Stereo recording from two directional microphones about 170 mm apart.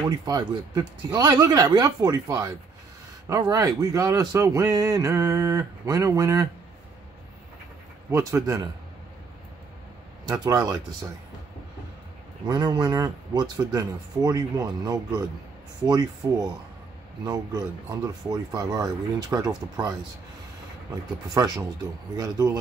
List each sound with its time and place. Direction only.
0.2 s speech: 20° right (ahead or behind)
8.1 s speech: 15° right (ahead or behind)
10.2 s speech: 20° right (ahead or behind)
12.4 s speech: 25° right (ahead or behind)
21.3 s speech: 20° right (ahead or behind)